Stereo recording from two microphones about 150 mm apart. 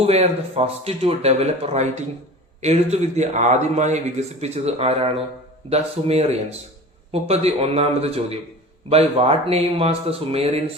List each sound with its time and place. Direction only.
0.0 s speech: 45° right (ahead or behind)